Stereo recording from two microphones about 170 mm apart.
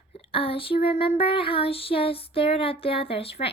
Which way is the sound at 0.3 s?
35° left (ahead or behind).